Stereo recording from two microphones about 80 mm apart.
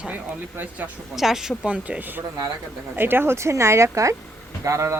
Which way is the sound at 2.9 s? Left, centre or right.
Right.